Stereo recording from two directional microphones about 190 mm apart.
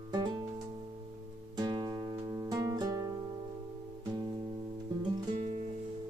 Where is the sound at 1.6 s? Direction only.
25° right (ahead or behind).